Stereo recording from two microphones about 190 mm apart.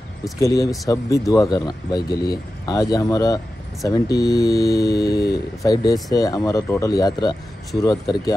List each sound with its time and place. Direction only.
0.4 s speech: 15° left (ahead or behind)